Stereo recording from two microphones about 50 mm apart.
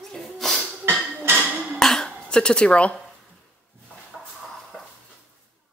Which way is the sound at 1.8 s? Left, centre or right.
Centre.